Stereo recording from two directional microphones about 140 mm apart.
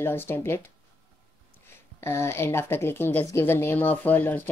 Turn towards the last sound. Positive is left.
turn(degrees=15)  # may be behind; listen again after turning